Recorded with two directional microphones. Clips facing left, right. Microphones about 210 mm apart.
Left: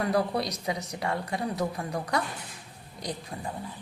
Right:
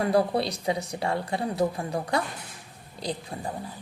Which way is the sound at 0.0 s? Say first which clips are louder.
Right 3 dB; 30° right (ahead or behind).